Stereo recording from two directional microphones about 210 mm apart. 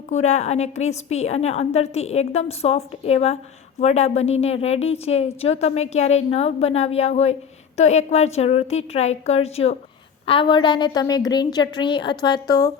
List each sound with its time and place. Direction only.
0.1 s a woman's voice: 35° left (ahead or behind); by 12.7 s 20° left (ahead or behind)